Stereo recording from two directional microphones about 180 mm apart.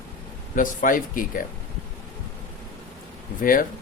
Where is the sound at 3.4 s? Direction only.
50° left (ahead or behind).